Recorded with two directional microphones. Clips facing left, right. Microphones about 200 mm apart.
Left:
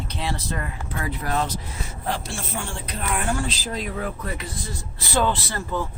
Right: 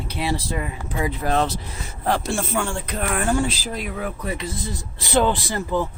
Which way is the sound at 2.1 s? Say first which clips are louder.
Right 7 dB; 65° right (ahead or behind).